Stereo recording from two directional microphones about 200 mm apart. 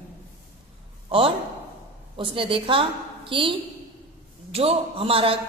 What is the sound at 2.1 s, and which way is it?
A woman's voice, 25° right (ahead or behind).